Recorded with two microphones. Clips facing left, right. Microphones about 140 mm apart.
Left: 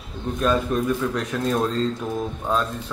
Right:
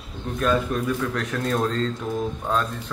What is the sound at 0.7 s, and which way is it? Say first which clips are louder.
Speech: left 2 dB; 20° left (ahead or behind).